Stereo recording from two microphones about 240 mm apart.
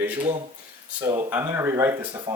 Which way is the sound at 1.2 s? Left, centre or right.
Centre.